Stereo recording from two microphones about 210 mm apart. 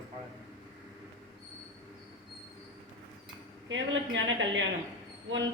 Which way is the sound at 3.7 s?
60° right (ahead or behind).